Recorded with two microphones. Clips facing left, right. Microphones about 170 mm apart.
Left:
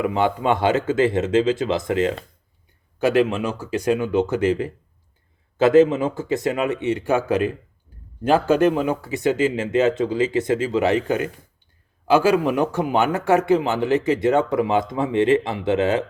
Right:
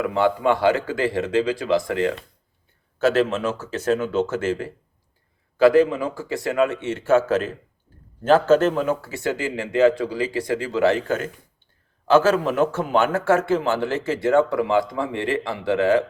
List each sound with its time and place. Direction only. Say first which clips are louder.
0.0 s a man's voice: right 1 dB; 20° left (ahead or behind)